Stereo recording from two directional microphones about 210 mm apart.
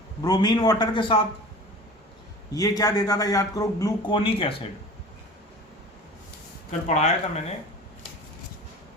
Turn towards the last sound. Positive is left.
turn(degrees=30)  # may be behind; listen again after turning